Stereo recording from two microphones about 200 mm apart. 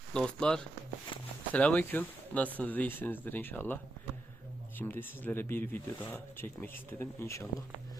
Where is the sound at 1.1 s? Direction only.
25° left (ahead or behind).